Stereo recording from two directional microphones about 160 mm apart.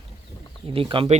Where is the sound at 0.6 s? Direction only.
35° right (ahead or behind).